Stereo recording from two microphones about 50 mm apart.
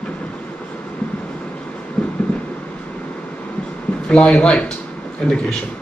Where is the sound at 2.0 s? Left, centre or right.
Centre.